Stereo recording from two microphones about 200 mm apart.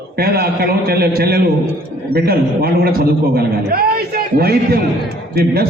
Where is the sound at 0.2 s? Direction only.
50° right (ahead or behind).